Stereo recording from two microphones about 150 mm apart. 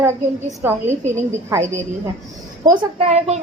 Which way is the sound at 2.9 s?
45° right (ahead or behind).